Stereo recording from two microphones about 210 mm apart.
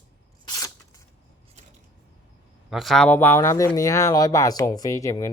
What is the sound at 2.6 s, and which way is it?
Speech, centre (ahead or behind).